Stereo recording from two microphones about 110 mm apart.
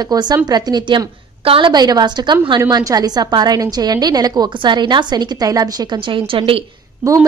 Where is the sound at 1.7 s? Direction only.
40° right (ahead or behind); by 6.6 s 55° right (ahead or behind).